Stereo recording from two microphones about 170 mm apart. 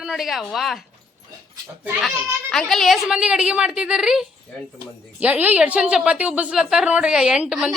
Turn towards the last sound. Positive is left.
turn(degrees=-5)  # may be behind; listen again after turning